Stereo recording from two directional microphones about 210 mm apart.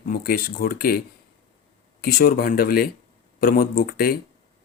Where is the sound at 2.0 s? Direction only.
45° left (ahead or behind).